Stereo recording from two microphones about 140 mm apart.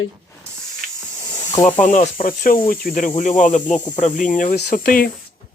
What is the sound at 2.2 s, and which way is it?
Speech, 90° left.